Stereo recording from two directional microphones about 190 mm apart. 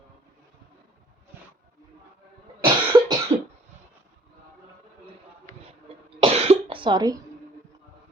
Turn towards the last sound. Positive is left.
turn(degrees=-20)  # may be behind; listen again after turning